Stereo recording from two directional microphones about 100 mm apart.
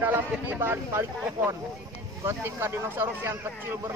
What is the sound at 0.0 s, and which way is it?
Speech, 20° right (ahead or behind).